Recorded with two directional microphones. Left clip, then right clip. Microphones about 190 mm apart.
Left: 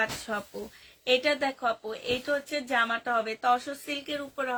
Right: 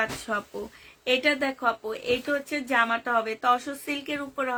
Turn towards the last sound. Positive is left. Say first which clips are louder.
# right 3 dB
turn(degrees=-35)  # may be behind; listen again after turning